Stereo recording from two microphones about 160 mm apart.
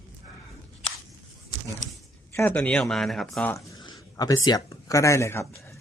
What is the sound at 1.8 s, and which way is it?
Zipper, 25° left (ahead or behind).